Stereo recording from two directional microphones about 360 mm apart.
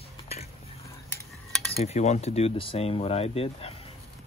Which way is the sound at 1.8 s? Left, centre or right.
Centre.